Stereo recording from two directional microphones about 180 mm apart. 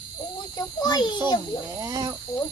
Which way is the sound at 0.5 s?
20° left (ahead or behind).